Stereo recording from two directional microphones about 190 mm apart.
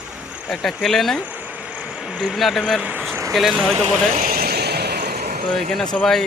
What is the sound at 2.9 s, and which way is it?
Vehicle, 10° right (ahead or behind).